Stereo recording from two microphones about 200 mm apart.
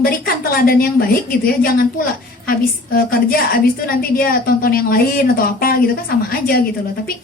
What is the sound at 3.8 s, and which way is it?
A woman's voice, 45° left (ahead or behind).